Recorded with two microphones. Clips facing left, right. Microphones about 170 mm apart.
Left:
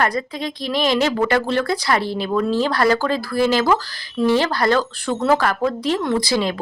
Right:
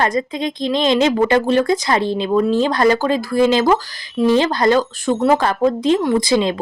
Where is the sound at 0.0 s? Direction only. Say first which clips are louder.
Right 3 dB; 20° right (ahead or behind).